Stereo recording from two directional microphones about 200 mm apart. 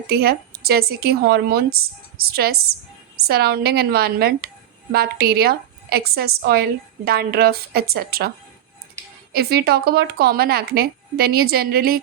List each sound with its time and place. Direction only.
0.1 s a woman's voice: 50° right (ahead or behind)
9.3 s a woman's voice: 50° right (ahead or behind)